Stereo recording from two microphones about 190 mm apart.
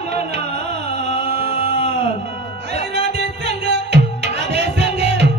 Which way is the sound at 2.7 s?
60° right (ahead or behind).